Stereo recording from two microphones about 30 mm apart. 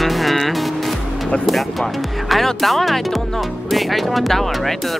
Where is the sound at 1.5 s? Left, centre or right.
Centre.